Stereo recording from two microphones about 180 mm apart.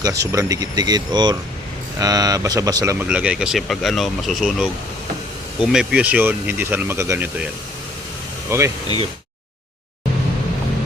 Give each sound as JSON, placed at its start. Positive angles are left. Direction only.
{"t": 0.0, "sound": "speech", "side_deg": -15}
{"t": 8.4, "sound": "speech", "side_deg": -15}